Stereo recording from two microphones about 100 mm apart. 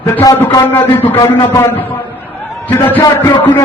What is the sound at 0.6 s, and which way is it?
Speech, 20° left (ahead or behind).